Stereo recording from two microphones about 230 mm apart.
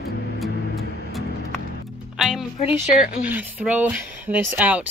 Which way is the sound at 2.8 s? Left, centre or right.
Left.